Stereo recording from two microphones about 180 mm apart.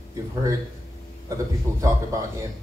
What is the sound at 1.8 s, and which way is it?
Music, 15° right (ahead or behind).